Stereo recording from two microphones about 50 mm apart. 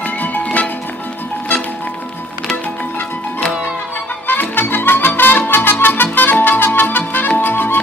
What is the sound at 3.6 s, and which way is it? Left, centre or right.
Music, left.